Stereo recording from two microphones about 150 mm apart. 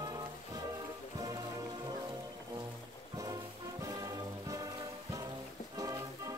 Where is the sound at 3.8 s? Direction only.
20° right (ahead or behind).